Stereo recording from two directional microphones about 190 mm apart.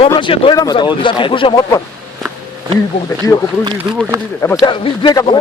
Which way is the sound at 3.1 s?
15° left (ahead or behind).